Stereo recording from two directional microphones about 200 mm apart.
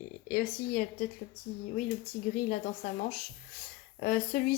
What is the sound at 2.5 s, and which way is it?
Speech, 45° left (ahead or behind).